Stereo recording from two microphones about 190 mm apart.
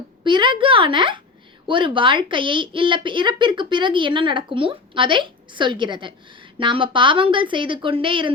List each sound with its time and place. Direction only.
0.3 s a woman's voice: 25° right (ahead or behind)